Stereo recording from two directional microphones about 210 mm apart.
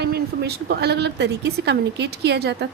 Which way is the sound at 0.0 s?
50° right (ahead or behind).